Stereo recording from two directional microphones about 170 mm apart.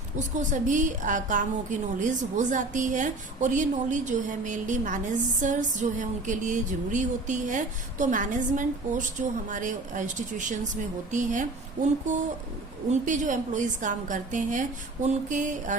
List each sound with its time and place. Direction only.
0.3 s a woman's voice: 45° right (ahead or behind)